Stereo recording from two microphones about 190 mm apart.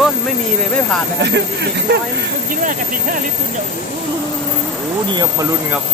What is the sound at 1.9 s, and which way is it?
Speech, 60° right (ahead or behind).